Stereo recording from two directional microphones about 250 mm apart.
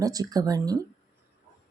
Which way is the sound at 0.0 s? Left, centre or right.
Centre.